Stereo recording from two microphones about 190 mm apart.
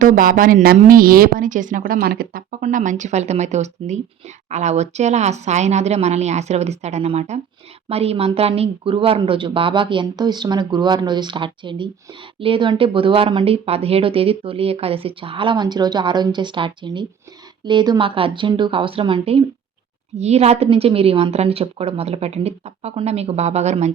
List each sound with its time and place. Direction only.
0.0 s a woman's voice: 45° right (ahead or behind)